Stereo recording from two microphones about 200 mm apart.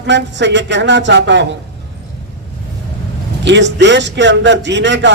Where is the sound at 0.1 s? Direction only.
60° right (ahead or behind).